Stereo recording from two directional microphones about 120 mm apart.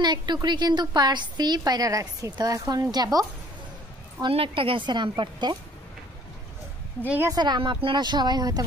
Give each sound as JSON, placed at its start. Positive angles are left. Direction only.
{"t": 0.0, "sound": "a woman's voice", "side_deg": -40}
{"t": 4.3, "sound": "speech", "side_deg": -50}
{"t": 7.2, "sound": "a woman's voice", "side_deg": -35}